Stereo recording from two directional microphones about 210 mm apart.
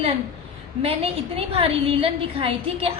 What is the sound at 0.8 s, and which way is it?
Female singing, 30° right (ahead or behind).